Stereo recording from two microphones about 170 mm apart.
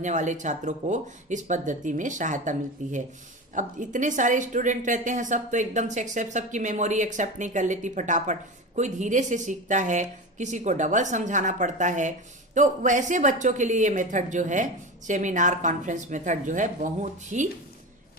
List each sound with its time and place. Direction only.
0.0 s a woman's voice: 45° right (ahead or behind)